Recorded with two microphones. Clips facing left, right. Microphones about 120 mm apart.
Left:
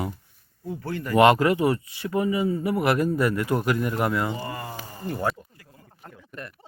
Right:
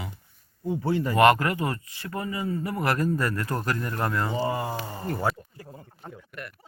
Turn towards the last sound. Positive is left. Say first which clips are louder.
# even
turn(degrees=5)  # may be behind; listen again after turning